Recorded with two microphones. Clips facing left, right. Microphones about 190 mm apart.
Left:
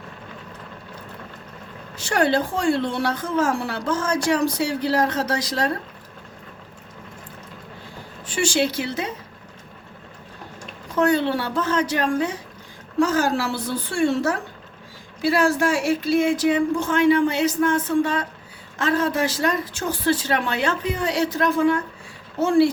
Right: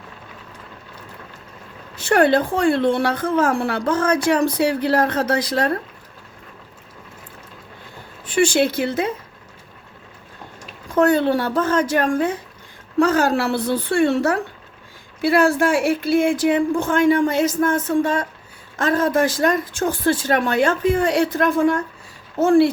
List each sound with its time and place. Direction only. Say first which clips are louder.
2.0 s a woman's voice: right 5 dB; 55° right (ahead or behind)
8.3 s a woman's voice: right 5 dB; 55° right (ahead or behind)
10.9 s a woman's voice: right 4 dB; 50° right (ahead or behind)